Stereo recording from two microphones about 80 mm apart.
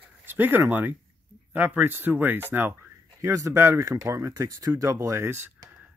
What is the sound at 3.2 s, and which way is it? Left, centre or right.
Speech, right.